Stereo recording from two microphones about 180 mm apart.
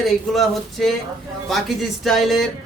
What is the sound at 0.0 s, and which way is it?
A man's voice, centre (ahead or behind).